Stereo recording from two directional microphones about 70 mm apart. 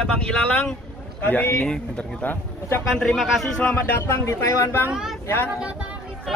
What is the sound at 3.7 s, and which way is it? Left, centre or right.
Speech, left.